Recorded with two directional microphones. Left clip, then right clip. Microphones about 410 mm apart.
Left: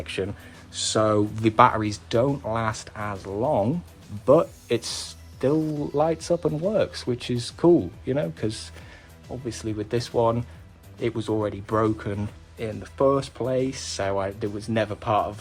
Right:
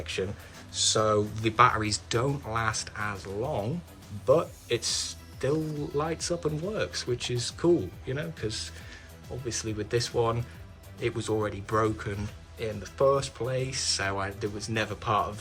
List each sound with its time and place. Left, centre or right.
0.0 s speech: centre